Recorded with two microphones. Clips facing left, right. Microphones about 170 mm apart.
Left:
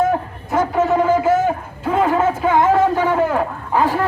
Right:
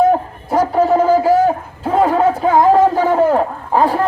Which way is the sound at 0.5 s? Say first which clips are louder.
Right 3 dB; 40° right (ahead or behind).